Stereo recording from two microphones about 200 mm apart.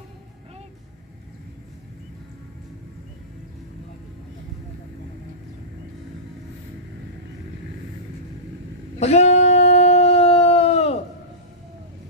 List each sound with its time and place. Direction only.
9.0 s howl: 35° left (ahead or behind)